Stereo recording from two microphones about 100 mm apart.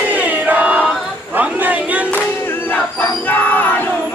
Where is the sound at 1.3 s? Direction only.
15° right (ahead or behind).